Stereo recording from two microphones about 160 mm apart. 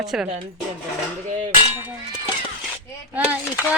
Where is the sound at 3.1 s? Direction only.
10° right (ahead or behind).